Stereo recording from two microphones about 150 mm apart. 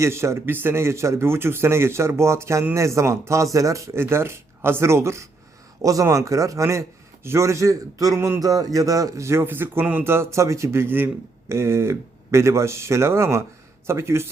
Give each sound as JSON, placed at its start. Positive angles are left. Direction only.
{"t": 0.0, "sound": "a man's voice", "side_deg": -20}